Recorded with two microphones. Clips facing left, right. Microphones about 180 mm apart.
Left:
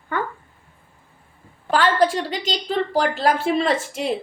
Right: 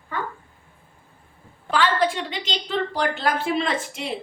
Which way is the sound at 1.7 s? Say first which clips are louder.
Left 3 dB; 45° left (ahead or behind).